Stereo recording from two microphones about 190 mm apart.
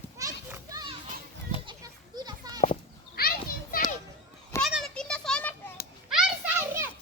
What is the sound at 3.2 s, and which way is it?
Children playing, 50° left (ahead or behind).